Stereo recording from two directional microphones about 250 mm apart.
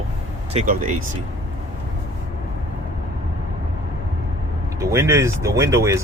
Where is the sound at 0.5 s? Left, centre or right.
Right.